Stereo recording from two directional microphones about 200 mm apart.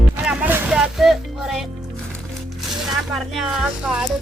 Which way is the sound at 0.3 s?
5° right (ahead or behind).